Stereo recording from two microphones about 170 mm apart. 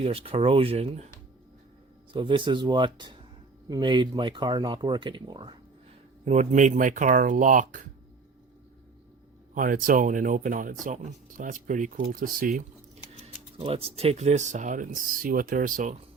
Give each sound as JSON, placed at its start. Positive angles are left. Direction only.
{"t": 0.0, "sound": "speech", "side_deg": -35}
{"t": 2.1, "sound": "speech", "side_deg": -30}
{"t": 6.2, "sound": "speech", "side_deg": -45}
{"t": 9.6, "sound": "speech", "side_deg": -55}
{"t": 13.2, "sound": "speech", "side_deg": -35}